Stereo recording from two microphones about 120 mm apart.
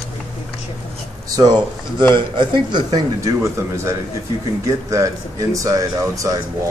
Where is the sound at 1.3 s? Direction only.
35° right (ahead or behind).